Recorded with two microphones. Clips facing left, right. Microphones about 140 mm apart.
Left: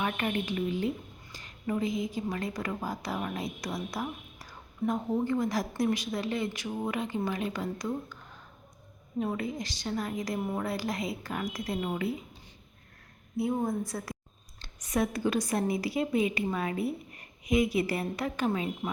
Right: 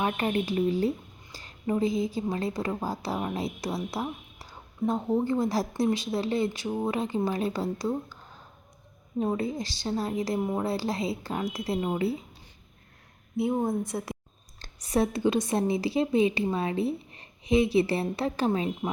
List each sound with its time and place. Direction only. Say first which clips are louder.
0.0 s a woman's voice: right 4 dB; 30° right (ahead or behind)
13.3 s a woman's voice: right 3 dB; 25° right (ahead or behind)